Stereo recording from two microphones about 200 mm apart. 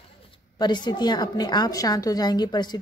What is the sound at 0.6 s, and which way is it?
A woman's voice, 20° left (ahead or behind).